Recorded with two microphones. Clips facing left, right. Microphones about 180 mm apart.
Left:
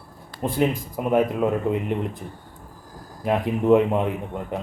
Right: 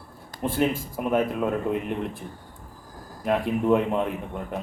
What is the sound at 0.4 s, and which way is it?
Speech, 15° left (ahead or behind).